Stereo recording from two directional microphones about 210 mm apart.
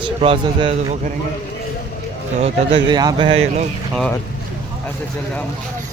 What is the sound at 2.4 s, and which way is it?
Speech, 30° right (ahead or behind).